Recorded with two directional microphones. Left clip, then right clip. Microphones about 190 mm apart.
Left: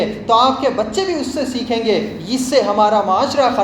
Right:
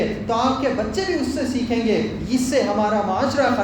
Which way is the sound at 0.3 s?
20° left (ahead or behind).